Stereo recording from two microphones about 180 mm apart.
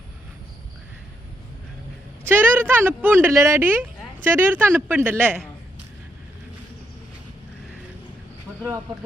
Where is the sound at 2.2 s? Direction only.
10° right (ahead or behind).